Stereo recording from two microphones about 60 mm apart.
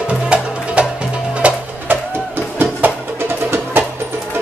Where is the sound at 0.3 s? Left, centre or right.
Centre.